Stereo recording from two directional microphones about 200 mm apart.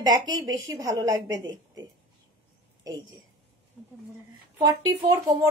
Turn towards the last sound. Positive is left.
turn(degrees=-20)  # may be behind; listen again after turning